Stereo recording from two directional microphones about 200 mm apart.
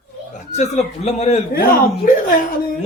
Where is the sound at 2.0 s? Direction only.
45° left (ahead or behind).